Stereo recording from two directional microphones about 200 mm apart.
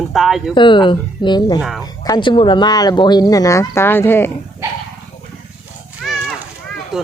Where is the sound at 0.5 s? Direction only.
25° left (ahead or behind).